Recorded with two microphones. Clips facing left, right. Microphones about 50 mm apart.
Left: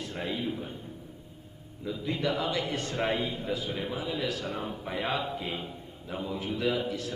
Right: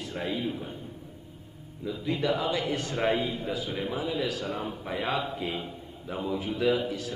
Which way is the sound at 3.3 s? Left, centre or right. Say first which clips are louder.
Right 1 dB; right.